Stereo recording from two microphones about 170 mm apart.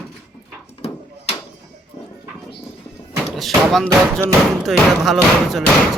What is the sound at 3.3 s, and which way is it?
Speech, centre (ahead or behind).